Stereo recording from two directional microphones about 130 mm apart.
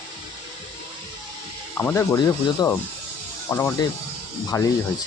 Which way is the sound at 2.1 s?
30° left (ahead or behind).